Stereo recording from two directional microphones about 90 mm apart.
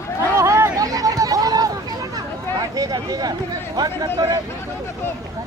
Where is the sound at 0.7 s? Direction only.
40° right (ahead or behind).